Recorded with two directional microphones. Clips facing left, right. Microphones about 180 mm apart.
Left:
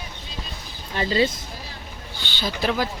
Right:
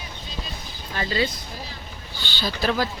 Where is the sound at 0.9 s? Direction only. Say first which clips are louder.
Left 4 dB; 25° left (ahead or behind).